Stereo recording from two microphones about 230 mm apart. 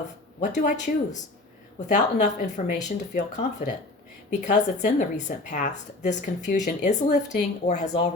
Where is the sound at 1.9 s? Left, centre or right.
Left.